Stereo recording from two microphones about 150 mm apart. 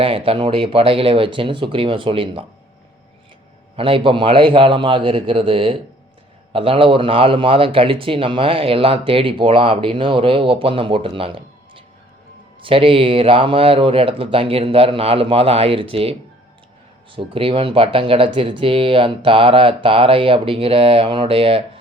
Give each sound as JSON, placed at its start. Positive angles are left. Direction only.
{"t": 0.0, "sound": "a man's voice", "side_deg": -35}
{"t": 3.8, "sound": "a man's voice", "side_deg": -35}
{"t": 17.2, "sound": "a man's voice", "side_deg": -35}